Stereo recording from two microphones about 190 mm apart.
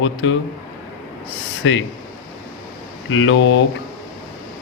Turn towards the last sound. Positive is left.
turn(degrees=75)  # may be behind; listen again after turning